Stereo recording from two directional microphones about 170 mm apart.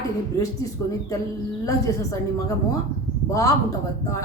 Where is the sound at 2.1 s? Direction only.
20° left (ahead or behind).